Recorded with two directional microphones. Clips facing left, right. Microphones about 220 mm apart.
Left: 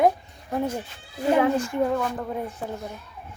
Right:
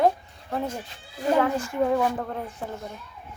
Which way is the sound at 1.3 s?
15° left (ahead or behind).